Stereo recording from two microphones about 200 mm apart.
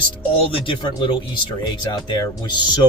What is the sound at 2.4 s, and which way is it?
Speech, 20° left (ahead or behind).